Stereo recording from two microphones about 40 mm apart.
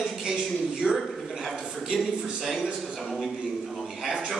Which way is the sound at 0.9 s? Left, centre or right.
Centre.